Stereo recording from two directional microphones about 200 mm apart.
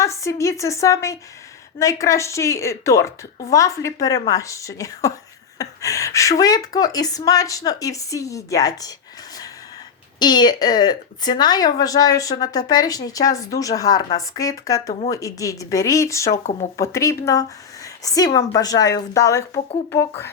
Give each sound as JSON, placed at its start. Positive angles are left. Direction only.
{"t": 0.0, "sound": "a woman's voice", "side_deg": 15}
{"t": 10.2, "sound": "speech", "side_deg": 20}
{"t": 16.4, "sound": "speech", "side_deg": 35}
{"t": 16.7, "sound": "speech", "side_deg": 15}